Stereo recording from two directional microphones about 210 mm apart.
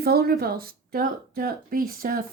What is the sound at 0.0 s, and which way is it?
A woman's voice, 50° right (ahead or behind).